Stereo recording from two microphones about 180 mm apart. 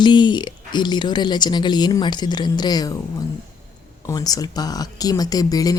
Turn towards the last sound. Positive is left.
turn(degrees=20)  # may be behind; listen again after turning